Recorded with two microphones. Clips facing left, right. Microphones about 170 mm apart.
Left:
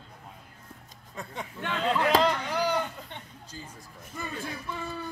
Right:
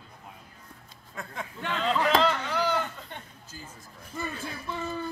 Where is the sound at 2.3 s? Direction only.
15° left (ahead or behind).